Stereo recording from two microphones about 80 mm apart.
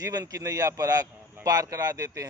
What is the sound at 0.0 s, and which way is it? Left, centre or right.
A man's voice, right.